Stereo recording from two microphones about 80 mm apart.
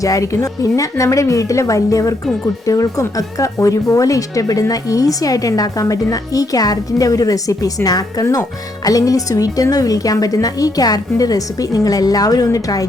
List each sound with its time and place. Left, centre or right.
0.0 s a woman's voice: left